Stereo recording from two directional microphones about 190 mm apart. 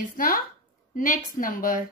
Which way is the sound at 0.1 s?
45° left (ahead or behind).